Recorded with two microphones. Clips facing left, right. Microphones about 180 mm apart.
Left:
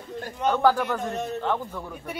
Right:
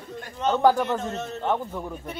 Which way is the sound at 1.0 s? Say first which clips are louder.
Left 2 dB; 15° left (ahead or behind).